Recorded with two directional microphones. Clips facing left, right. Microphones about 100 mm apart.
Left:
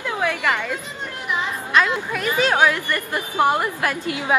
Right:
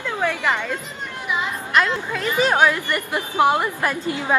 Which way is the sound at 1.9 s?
15° left (ahead or behind).